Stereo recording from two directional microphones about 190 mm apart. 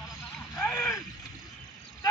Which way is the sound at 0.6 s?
10° left (ahead or behind).